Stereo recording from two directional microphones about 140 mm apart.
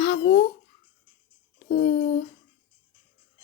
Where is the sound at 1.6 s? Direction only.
80° left.